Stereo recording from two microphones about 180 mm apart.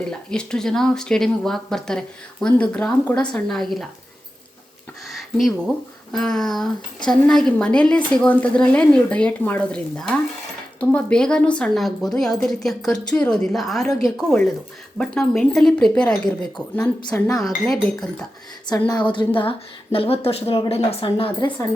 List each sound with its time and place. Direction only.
0.0 s a woman's voice: 5° left (ahead or behind)
5.0 s a sound: centre (ahead or behind)
6.1 s a woman's voice: 5° left (ahead or behind)
18.7 s a woman's voice: 25° left (ahead or behind)